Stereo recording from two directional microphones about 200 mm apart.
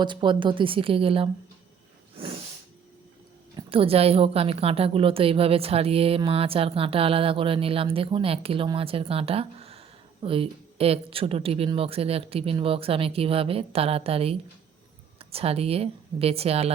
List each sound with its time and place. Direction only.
0.0 s a woman's voice: 25° right (ahead or behind)
3.5 s a woman's voice: 25° right (ahead or behind)